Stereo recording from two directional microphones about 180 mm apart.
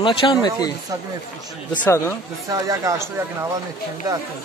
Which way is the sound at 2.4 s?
20° right (ahead or behind).